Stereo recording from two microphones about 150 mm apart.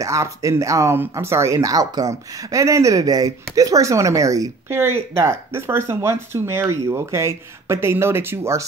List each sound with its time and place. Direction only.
0.0 s speech: 20° right (ahead or behind)